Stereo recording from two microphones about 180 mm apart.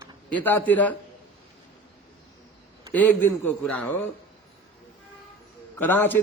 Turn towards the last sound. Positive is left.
turn(degrees=10)  # may be behind; listen again after turning